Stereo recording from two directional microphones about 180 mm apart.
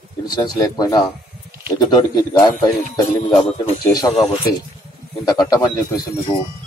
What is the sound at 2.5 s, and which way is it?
Speech, 40° left (ahead or behind).